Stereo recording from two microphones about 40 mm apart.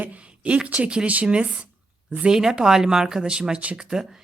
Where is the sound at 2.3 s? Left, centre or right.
Centre.